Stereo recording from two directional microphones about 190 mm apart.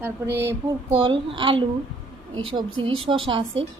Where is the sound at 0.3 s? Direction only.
60° right (ahead or behind).